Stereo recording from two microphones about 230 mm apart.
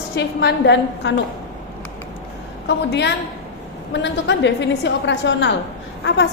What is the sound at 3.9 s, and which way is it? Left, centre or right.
A woman's voice, left.